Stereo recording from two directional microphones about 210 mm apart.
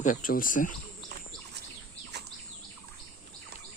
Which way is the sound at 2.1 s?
55° right (ahead or behind).